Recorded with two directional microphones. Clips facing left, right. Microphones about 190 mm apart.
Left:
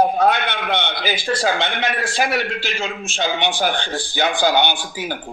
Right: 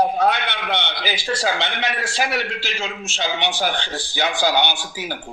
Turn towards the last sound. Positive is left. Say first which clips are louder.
# left 2 dB
turn(degrees=55)  # may be behind; listen again after turning